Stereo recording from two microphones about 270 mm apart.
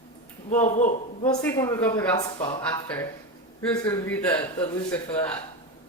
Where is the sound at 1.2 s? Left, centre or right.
Centre.